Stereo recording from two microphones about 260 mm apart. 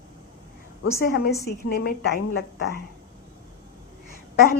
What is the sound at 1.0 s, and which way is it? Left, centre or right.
A woman's voice, left.